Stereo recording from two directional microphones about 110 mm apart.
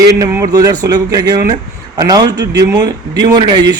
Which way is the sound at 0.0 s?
30° right (ahead or behind).